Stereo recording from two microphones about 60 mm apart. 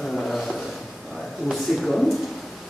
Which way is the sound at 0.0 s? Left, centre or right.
Centre.